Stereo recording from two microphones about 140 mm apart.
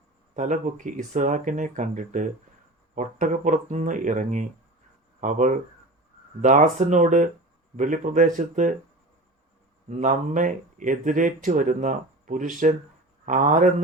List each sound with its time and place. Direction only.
0.3 s speech: 60° right (ahead or behind)
9.9 s speech: 65° right (ahead or behind)